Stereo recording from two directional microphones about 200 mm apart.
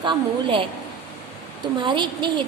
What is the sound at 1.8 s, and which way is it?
Speech, 25° right (ahead or behind).